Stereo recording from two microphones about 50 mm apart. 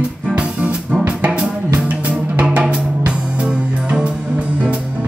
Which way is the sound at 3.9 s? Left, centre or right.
Right.